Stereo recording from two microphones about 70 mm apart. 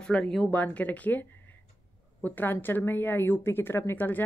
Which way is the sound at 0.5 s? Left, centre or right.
Left.